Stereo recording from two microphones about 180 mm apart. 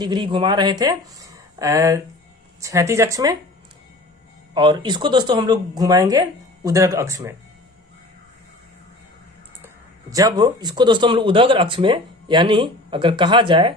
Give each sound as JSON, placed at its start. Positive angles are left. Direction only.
{"t": 0.0, "sound": "speech", "side_deg": -25}
{"t": 4.5, "sound": "speech", "side_deg": -25}
{"t": 10.1, "sound": "speech", "side_deg": -20}